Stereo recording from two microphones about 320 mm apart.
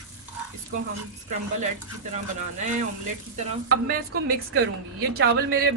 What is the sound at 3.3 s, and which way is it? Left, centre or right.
Speech, right.